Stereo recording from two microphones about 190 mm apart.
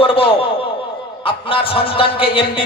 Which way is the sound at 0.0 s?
30° left (ahead or behind).